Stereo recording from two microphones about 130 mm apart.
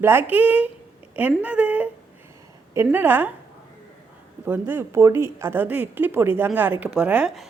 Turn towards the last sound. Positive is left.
turn(degrees=-10)  # may be behind; listen again after turning